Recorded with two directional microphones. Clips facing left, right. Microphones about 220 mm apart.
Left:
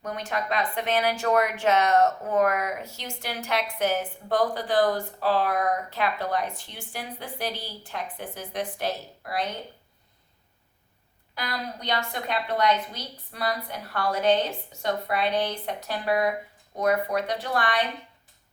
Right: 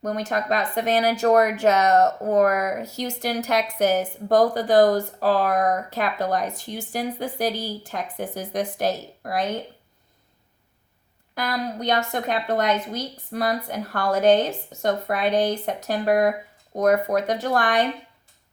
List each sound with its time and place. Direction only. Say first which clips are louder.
0.0 s speech: right 5 dB; 40° right (ahead or behind)
11.3 s a woman's voice: right 7 dB; 50° right (ahead or behind)